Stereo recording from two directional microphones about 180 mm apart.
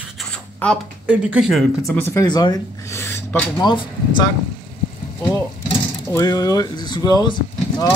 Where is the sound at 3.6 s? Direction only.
25° left (ahead or behind).